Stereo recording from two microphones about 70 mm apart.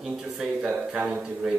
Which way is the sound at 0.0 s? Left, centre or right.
Centre.